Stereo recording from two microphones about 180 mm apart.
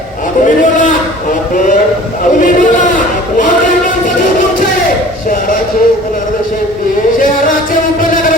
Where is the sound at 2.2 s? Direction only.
45° left (ahead or behind).